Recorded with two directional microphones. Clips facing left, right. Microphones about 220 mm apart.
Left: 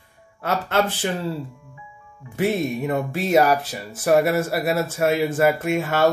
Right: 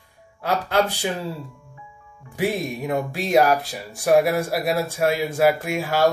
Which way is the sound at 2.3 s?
Centre (ahead or behind).